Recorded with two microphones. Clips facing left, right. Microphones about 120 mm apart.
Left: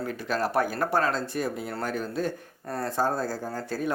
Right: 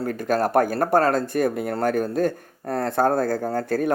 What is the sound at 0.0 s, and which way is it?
Speech, 45° right (ahead or behind).